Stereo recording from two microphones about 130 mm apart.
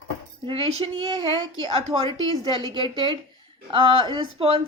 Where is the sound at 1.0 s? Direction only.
35° right (ahead or behind).